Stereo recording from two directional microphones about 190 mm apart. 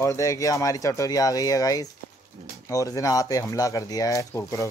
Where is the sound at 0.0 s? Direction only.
15° left (ahead or behind).